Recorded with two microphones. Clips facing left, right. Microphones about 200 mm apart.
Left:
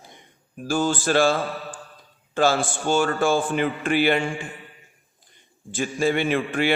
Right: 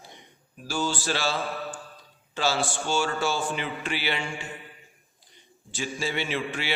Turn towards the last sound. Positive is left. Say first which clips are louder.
# left 8 dB
turn(degrees=50)  # may be behind; listen again after turning